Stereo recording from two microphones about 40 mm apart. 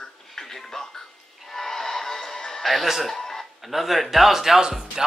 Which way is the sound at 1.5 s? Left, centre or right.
Centre.